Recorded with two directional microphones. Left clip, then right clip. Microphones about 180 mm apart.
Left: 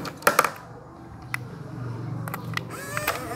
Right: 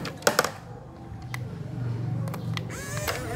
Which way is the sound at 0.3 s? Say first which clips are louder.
Left 3 dB; centre (ahead or behind).